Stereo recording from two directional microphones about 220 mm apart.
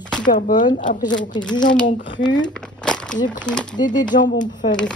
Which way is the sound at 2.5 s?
5° left (ahead or behind).